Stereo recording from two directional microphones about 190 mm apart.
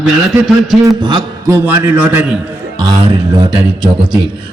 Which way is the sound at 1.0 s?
25° right (ahead or behind).